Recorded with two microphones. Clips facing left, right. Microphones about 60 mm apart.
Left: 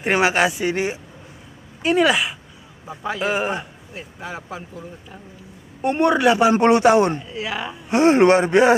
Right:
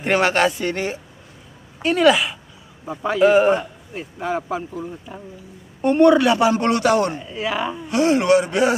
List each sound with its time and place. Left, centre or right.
0.0 s a man's voice: centre
5.8 s a man's voice: centre
7.2 s a man's voice: centre
7.9 s speech: left